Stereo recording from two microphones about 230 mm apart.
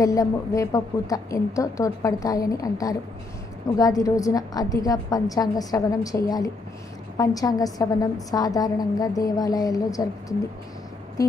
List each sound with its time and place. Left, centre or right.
0.0 s a woman's voice: centre